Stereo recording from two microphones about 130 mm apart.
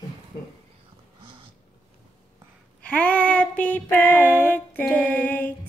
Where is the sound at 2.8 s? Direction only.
10° left (ahead or behind).